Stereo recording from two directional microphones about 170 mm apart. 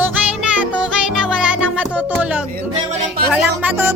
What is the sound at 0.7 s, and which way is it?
Music, 5° right (ahead or behind).